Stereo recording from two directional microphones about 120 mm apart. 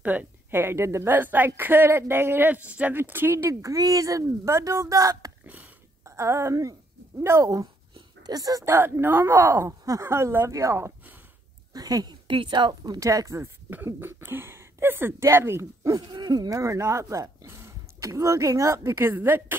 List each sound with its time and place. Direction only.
0.0 s a woman's voice: 15° right (ahead or behind)
11.7 s speech: 30° right (ahead or behind)
16.1 s speech: 35° right (ahead or behind); by 19.4 s 20° right (ahead or behind)